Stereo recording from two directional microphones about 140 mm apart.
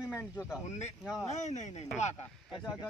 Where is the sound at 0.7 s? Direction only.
55° left (ahead or behind).